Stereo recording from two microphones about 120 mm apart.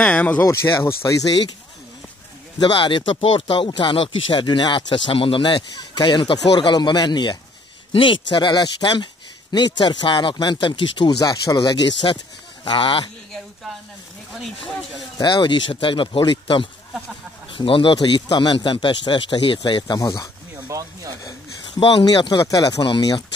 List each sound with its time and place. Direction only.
0.0 s speech: 10° left (ahead or behind)
0.5 s speech: 20° left (ahead or behind)
2.6 s speech: 40° left (ahead or behind)
15.1 s speech: 40° left (ahead or behind)
20.6 s speech: 25° right (ahead or behind)
21.2 s a sound: 30° left (ahead or behind)
21.7 s speech: 40° left (ahead or behind)